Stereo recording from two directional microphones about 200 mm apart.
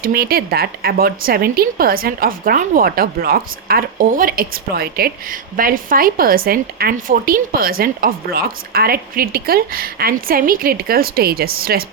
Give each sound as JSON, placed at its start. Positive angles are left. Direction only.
{"t": 0.0, "sound": "speech", "side_deg": -50}